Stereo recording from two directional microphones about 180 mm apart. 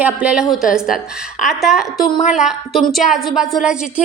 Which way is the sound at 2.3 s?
5° right (ahead or behind).